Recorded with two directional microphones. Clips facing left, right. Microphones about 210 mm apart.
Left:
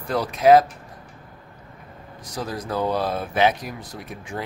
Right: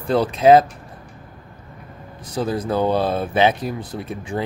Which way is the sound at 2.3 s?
30° right (ahead or behind).